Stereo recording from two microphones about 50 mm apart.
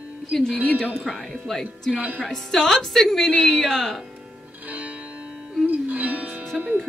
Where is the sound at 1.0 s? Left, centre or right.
Centre.